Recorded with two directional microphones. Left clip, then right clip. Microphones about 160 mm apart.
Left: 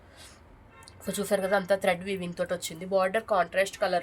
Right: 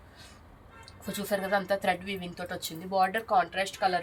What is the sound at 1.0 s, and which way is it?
Speech, 90° left.